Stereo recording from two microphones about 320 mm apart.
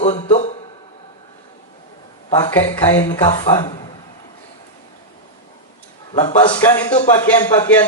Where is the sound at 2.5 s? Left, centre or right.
Centre.